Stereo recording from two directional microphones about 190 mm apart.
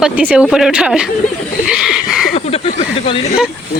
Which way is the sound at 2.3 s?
30° left (ahead or behind).